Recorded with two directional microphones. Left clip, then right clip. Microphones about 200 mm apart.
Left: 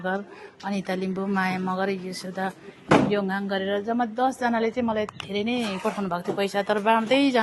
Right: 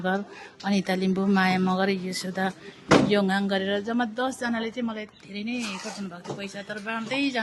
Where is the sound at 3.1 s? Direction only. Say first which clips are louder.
Right 2 dB; 25° right (ahead or behind); by 4.1 s 10° right (ahead or behind).